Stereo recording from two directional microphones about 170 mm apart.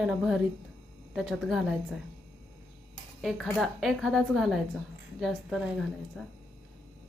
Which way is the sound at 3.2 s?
Centre (ahead or behind).